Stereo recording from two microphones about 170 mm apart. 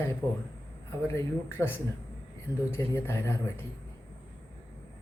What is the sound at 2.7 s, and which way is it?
Speech, 15° left (ahead or behind).